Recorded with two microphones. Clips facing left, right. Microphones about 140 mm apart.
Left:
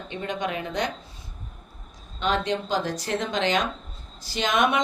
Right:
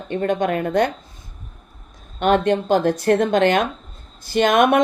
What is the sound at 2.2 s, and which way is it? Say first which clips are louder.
A woman's voice: right 8 dB; 55° right (ahead or behind).